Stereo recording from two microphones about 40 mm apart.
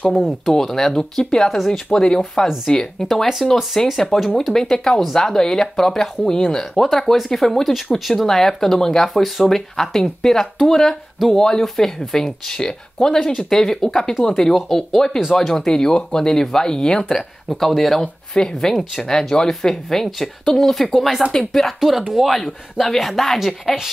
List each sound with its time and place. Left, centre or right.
0.1 s speech: centre
0.6 s speech: centre
3.1 s a woman's voice: centre
11.6 s speech: centre
17.5 s a woman's voice: centre
21.7 s a woman's voice: centre